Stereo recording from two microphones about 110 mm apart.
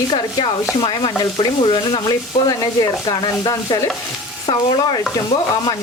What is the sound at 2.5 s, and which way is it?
Speech, 40° left (ahead or behind).